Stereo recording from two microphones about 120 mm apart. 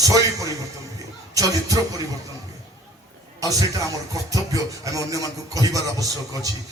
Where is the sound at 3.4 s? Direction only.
30° right (ahead or behind).